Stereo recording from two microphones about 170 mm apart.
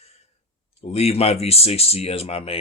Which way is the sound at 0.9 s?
35° left (ahead or behind).